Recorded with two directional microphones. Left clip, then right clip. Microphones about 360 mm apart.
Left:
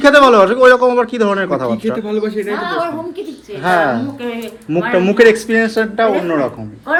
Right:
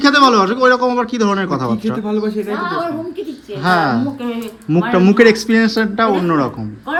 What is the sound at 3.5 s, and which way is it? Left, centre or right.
Speech, centre.